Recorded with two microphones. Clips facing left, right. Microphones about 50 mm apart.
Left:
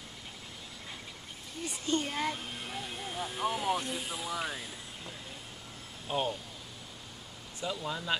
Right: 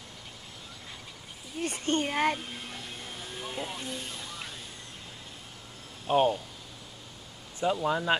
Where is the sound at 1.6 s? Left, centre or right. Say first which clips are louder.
Right 4 dB; right.